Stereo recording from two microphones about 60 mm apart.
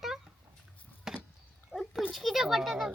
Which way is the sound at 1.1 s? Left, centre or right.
Centre.